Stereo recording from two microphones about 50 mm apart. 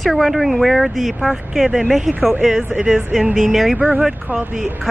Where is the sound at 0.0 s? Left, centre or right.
Centre.